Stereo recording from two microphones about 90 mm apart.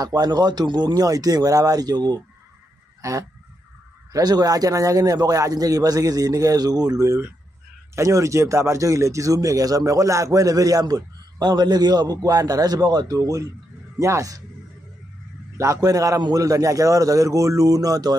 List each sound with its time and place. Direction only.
0.0 s a man's voice: 45° right (ahead or behind)
3.0 s goose: 35° right (ahead or behind)
4.1 s a man's voice: 45° right (ahead or behind)
15.5 s speech: 35° right (ahead or behind)